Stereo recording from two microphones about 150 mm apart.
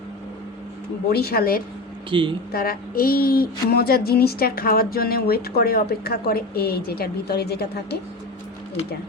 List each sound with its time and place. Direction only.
1.1 s speech: 90° left
2.0 s speech: 35° right (ahead or behind)
2.5 s speech: 85° left